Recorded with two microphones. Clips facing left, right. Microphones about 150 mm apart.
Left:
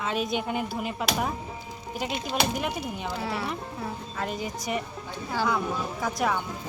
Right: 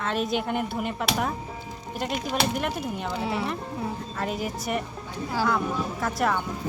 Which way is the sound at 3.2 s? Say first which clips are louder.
Right 3 dB; 20° right (ahead or behind).